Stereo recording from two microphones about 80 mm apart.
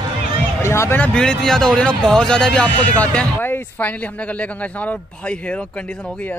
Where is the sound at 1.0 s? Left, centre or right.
Centre.